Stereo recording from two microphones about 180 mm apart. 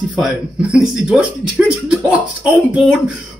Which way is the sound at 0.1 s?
5° right (ahead or behind).